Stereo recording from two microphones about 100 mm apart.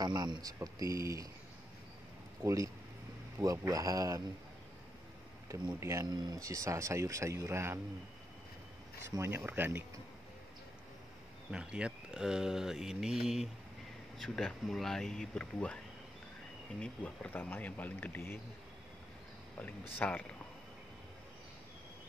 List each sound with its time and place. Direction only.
0.0 s speech: 45° right (ahead or behind)
0.6 s speech: 30° right (ahead or behind)
2.4 s speech: 30° right (ahead or behind)
5.5 s speech: 30° right (ahead or behind)
9.1 s speech: 25° right (ahead or behind)
11.5 s speech: 10° right (ahead or behind); by 15.8 s 10° left (ahead or behind)
16.8 s speech: 15° left (ahead or behind)
20.0 s speech: 15° left (ahead or behind)